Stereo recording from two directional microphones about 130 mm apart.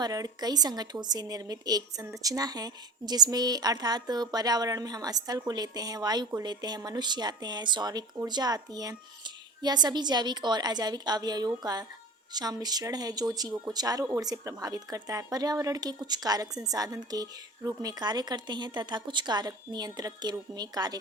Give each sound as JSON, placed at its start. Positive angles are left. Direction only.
{"t": 0.0, "sound": "a woman's voice", "side_deg": -30}